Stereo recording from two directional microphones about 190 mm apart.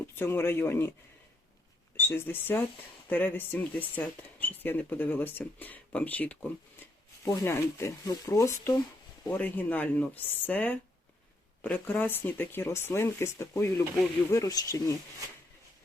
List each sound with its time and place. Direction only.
0.2 s speech: 10° left (ahead or behind)
2.0 s speech: 10° left (ahead or behind)